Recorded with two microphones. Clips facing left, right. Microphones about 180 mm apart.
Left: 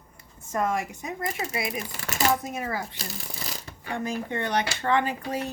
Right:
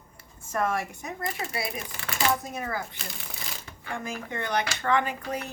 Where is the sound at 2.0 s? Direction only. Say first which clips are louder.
Left 2 dB; 40° left (ahead or behind).